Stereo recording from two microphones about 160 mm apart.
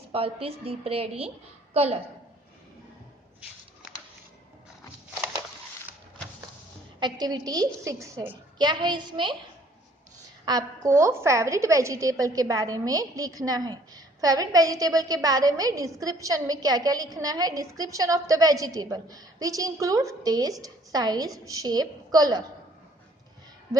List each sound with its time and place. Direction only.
0.1 s a woman's voice: 35° right (ahead or behind)
7.0 s a woman's voice: 25° right (ahead or behind)
8.5 s a woman's voice: 25° right (ahead or behind)
10.4 s a woman's voice: 20° right (ahead or behind)